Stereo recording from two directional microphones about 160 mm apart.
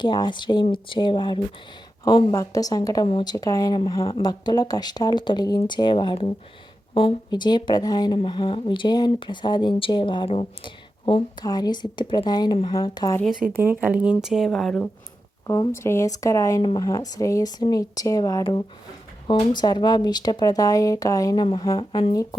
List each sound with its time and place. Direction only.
0.0 s a woman's voice: 30° left (ahead or behind)
13.2 s speech: 5° right (ahead or behind)
15.4 s a woman's voice: 20° left (ahead or behind)